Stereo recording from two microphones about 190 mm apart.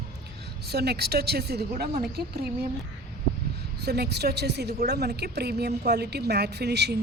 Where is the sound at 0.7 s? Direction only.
60° right (ahead or behind).